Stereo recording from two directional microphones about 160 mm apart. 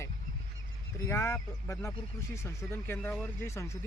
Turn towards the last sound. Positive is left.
turn(degrees=15)  # may be behind; listen again after turning